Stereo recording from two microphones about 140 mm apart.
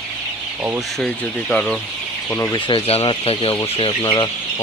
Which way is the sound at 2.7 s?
40° left (ahead or behind).